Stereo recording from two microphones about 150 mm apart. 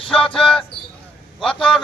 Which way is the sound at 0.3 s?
5° left (ahead or behind).